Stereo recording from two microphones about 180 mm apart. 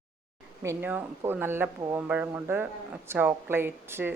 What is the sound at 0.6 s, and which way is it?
Speech, 15° right (ahead or behind).